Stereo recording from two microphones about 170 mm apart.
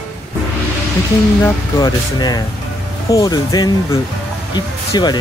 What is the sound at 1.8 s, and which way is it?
Speech, 25° left (ahead or behind).